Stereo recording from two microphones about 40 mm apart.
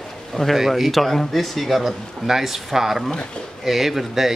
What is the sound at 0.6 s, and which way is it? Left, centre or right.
A man's voice, centre.